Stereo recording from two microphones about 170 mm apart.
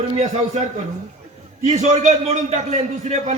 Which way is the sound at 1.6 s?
45° right (ahead or behind).